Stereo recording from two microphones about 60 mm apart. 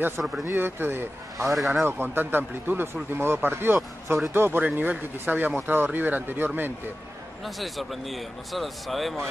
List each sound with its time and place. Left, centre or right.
0.2 s speech: right
0.6 s speech: right
4.6 s speech: right
7.4 s speech: centre